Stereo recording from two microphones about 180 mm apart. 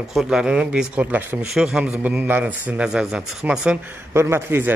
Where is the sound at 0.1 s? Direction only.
5° right (ahead or behind).